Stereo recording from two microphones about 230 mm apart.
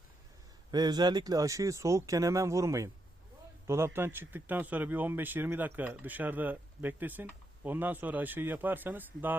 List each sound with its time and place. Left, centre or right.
0.7 s speech: centre